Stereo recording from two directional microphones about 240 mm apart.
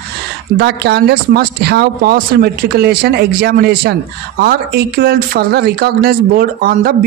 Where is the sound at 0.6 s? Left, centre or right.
Right.